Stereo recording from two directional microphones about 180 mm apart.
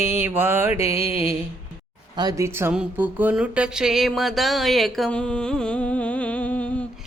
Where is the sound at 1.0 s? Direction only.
35° left (ahead or behind).